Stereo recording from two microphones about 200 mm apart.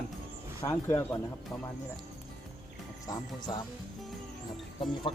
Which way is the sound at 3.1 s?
20° left (ahead or behind).